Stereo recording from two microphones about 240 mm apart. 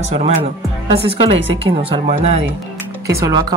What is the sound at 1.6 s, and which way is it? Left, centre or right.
Speech, right.